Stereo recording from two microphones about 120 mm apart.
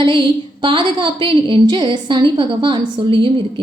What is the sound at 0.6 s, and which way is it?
A woman's voice, 45° right (ahead or behind).